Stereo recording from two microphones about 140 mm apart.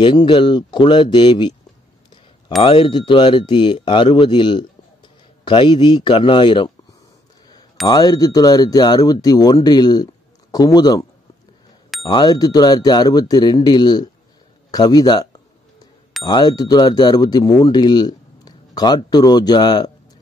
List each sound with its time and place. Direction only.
0.0 s speech: 35° left (ahead or behind)
2.6 s speech: 35° left (ahead or behind)
7.8 s speech: 30° left (ahead or behind)
16.3 s speech: 30° left (ahead or behind)